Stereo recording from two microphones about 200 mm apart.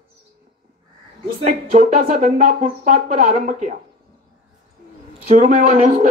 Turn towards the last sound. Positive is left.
turn(degrees=-40)  # may be behind; listen again after turning